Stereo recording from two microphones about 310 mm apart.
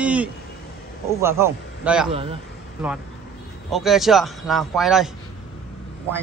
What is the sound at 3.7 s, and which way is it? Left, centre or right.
Speech, centre.